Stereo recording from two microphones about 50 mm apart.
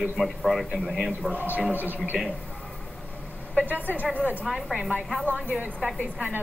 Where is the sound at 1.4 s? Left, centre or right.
Right.